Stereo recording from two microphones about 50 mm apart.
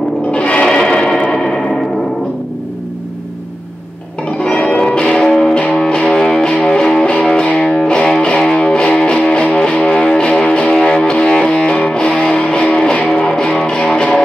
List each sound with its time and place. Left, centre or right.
0.3 s music: left
1.3 s a sound: centre
4.4 s music: centre